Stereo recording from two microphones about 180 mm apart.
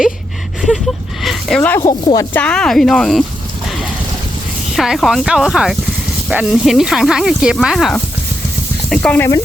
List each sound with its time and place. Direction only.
1.2 s a sound: centre (ahead or behind)
1.9 s speech: 20° left (ahead or behind)
2.3 s speech: 5° left (ahead or behind)
4.7 s speech: centre (ahead or behind)